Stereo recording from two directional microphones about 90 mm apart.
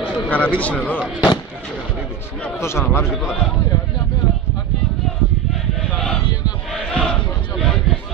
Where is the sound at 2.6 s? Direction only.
30° left (ahead or behind).